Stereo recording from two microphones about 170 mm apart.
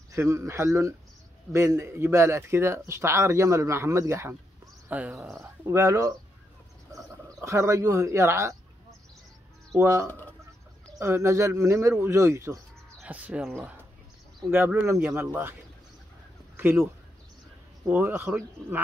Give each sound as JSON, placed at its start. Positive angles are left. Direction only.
{"t": 0.1, "sound": "a man's voice", "side_deg": -15}
{"t": 7.2, "sound": "a man's voice", "side_deg": -20}
{"t": 9.8, "sound": "a man's voice", "side_deg": -15}
{"t": 10.0, "sound": "speech", "side_deg": 10}
{"t": 11.0, "sound": "a man's voice", "side_deg": -15}
{"t": 16.5, "sound": "a sound", "side_deg": -15}
{"t": 17.8, "sound": "a man's voice", "side_deg": -10}